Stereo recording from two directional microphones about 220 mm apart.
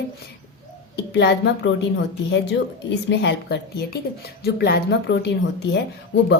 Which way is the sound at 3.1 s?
50° left (ahead or behind).